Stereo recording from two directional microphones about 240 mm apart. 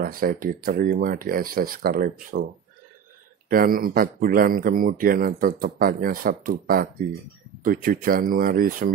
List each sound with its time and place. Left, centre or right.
0.0 s speech: right
3.4 s speech: right